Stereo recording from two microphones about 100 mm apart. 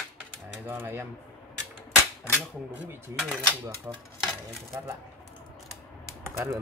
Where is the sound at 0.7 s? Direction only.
20° right (ahead or behind).